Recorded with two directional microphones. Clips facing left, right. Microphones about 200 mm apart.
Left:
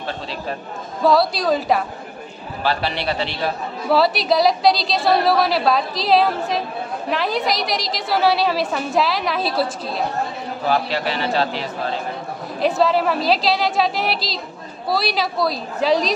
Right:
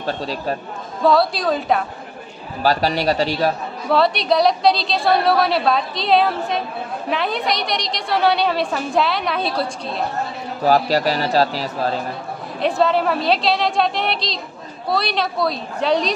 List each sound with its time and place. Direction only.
0.0 s a man's voice: 40° right (ahead or behind)
1.0 s a woman's voice: centre (ahead or behind)
2.6 s a man's voice: 40° right (ahead or behind)
3.9 s a woman's voice: 5° left (ahead or behind)
10.6 s a man's voice: 40° right (ahead or behind)
12.5 s a woman's voice: centre (ahead or behind)